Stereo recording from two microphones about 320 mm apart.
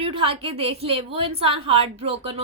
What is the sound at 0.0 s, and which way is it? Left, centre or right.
A woman's voice, centre.